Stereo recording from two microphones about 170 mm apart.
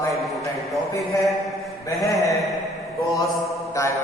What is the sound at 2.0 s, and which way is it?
Mantra, 20° left (ahead or behind).